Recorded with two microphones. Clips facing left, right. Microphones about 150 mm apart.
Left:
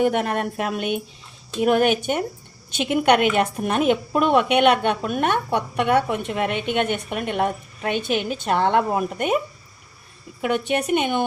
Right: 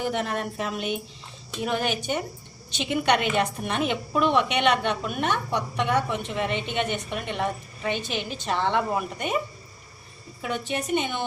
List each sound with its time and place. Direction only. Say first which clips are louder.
0.0 s a woman's voice: left 7 dB; 60° left (ahead or behind)
10.4 s a woman's voice: left 7 dB; 70° left (ahead or behind)